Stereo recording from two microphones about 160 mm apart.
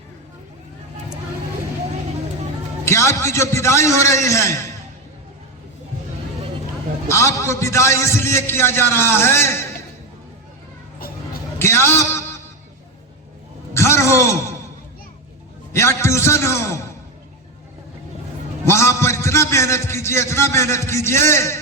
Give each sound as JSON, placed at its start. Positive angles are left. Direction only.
{"t": 2.8, "sound": "a man's voice", "side_deg": 20}
{"t": 7.1, "sound": "a man's voice", "side_deg": 15}
{"t": 11.6, "sound": "a sound", "side_deg": 15}
{"t": 13.7, "sound": "a sound", "side_deg": 15}
{"t": 15.7, "sound": "a man's voice", "side_deg": 15}
{"t": 18.6, "sound": "a man's voice", "side_deg": 15}